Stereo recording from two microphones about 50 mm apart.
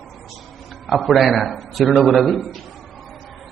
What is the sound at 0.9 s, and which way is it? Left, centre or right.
A man's voice, centre.